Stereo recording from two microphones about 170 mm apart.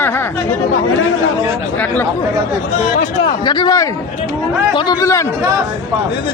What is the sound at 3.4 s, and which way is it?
A man's voice, 25° left (ahead or behind).